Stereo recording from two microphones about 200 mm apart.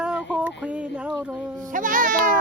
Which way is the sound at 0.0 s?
5° right (ahead or behind).